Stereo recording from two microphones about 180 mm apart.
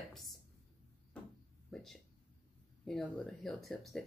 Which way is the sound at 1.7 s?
Centre (ahead or behind).